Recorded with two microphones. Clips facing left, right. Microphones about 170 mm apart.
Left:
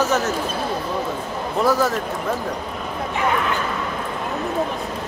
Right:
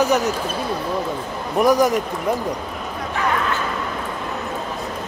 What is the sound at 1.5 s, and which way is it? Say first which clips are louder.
Speech: right 4 dB; 15° right (ahead or behind).